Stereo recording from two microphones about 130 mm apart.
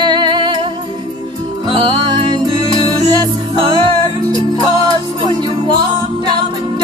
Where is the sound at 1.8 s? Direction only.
40° right (ahead or behind).